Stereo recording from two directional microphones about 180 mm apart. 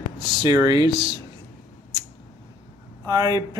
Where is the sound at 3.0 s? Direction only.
20° right (ahead or behind).